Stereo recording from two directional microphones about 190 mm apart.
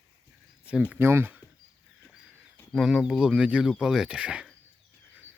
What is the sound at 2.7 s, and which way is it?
Speech, centre (ahead or behind).